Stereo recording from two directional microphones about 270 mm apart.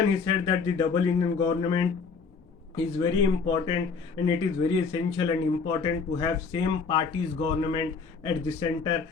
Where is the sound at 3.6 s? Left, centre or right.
Centre.